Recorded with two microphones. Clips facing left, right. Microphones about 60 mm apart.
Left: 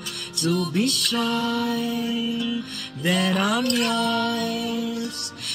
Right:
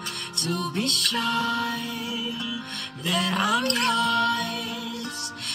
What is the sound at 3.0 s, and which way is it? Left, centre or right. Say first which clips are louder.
Music: left 4 dB; left.